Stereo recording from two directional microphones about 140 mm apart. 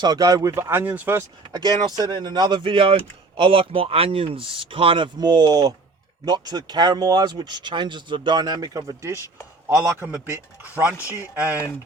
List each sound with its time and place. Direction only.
0.0 s speech: 30° right (ahead or behind)
1.5 s a man's voice: 30° right (ahead or behind); by 10.2 s 10° right (ahead or behind)
10.9 s speech: 20° left (ahead or behind)